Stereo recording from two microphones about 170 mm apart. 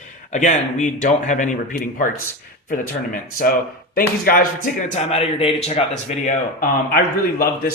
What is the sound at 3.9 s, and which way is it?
Speech, 60° left (ahead or behind).